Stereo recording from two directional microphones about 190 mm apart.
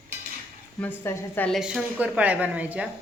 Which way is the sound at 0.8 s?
10° left (ahead or behind).